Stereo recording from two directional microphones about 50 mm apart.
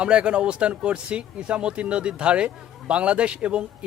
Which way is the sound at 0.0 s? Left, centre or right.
Right.